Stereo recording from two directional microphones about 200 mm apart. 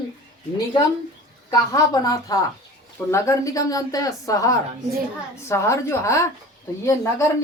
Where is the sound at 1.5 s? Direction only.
20° left (ahead or behind).